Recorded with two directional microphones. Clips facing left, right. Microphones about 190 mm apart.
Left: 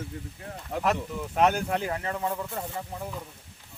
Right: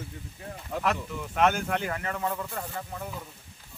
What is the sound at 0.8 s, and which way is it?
Speech, 35° left (ahead or behind).